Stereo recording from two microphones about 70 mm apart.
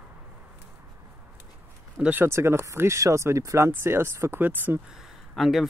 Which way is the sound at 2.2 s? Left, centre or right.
Right.